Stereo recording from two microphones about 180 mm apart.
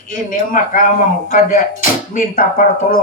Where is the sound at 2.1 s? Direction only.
50° left (ahead or behind).